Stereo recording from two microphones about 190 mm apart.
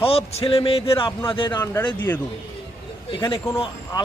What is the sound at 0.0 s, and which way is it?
Speech, 30° left (ahead or behind).